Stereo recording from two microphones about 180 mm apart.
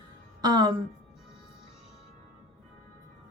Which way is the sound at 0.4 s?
25° right (ahead or behind).